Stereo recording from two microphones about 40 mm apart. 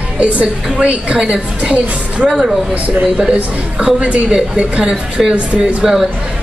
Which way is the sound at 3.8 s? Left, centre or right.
Right.